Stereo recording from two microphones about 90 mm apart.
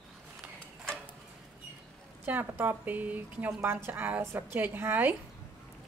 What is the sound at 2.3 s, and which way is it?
A woman's voice, 20° right (ahead or behind).